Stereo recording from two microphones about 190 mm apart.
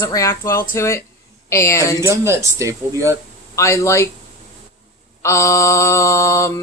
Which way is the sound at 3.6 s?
15° left (ahead or behind).